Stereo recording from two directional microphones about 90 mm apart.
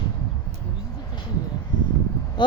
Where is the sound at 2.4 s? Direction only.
60° left (ahead or behind).